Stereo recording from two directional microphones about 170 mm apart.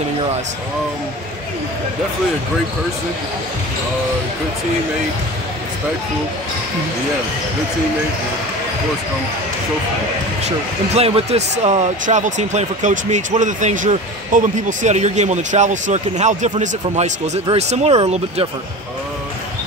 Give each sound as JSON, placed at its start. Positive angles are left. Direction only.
{"t": 10.4, "sound": "speech", "side_deg": -40}